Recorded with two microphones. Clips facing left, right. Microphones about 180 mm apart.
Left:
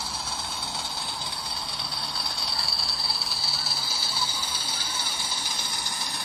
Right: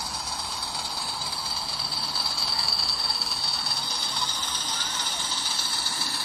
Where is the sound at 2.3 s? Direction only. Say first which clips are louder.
Right 1 dB; centre (ahead or behind).